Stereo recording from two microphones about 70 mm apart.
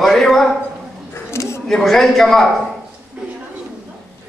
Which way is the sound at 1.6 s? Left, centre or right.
Centre.